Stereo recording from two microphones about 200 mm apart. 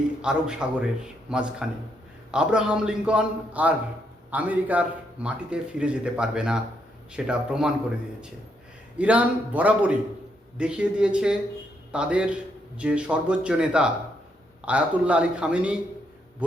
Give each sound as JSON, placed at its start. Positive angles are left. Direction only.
{"t": 0.2, "sound": "a man's voice", "side_deg": -5}
{"t": 9.0, "sound": "a man's voice", "side_deg": -5}